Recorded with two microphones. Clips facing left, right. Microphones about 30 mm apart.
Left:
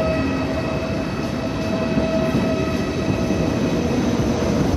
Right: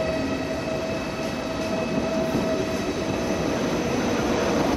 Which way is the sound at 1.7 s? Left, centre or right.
Left.